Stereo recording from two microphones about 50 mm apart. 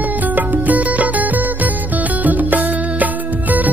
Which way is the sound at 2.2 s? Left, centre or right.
Right.